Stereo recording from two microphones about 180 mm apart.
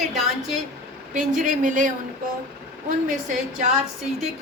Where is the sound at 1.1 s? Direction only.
45° right (ahead or behind).